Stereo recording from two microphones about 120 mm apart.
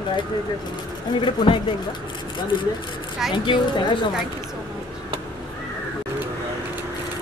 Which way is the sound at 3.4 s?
40° left (ahead or behind).